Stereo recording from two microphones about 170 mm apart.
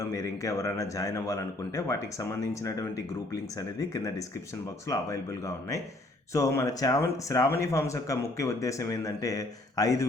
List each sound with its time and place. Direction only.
0.0 s speech: 20° left (ahead or behind)
6.3 s speech: 20° left (ahead or behind)